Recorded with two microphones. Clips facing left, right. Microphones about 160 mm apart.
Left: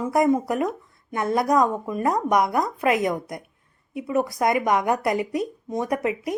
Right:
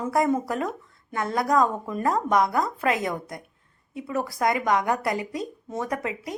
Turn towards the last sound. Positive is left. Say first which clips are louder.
# left 5 dB
turn(degrees=20)  # may be behind; listen again after turning